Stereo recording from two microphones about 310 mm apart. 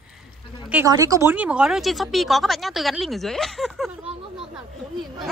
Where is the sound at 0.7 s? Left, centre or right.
Centre.